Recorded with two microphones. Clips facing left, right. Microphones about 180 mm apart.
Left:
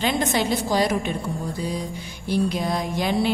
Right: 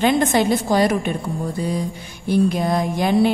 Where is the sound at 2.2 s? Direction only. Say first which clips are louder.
Right 5 dB; 50° right (ahead or behind).